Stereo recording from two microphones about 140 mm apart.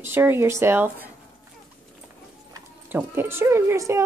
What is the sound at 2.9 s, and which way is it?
Speech, 15° right (ahead or behind).